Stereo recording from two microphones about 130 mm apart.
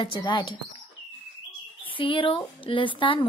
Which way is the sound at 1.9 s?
40° left (ahead or behind).